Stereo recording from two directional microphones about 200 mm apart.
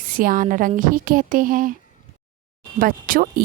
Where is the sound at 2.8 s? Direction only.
45° right (ahead or behind).